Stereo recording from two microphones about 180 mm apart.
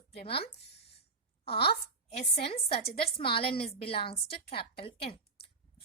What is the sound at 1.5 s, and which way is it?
Speech, 30° left (ahead or behind).